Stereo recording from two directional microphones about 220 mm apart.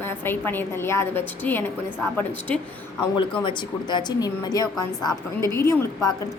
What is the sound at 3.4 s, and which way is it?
A woman's voice, 20° left (ahead or behind).